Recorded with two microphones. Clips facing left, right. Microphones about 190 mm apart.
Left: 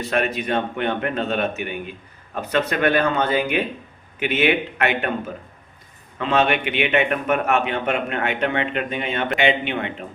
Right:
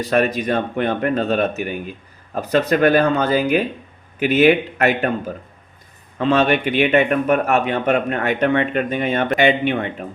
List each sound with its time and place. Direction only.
0.0 s speech: 40° right (ahead or behind)